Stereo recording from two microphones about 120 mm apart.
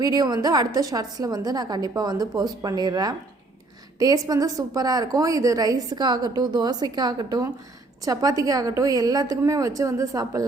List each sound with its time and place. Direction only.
0.0 s a woman's voice: 35° right (ahead or behind)